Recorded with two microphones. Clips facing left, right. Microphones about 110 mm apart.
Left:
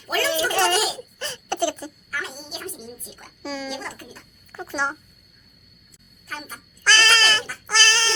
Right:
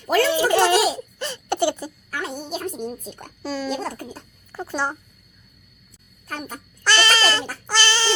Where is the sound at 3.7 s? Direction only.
45° right (ahead or behind).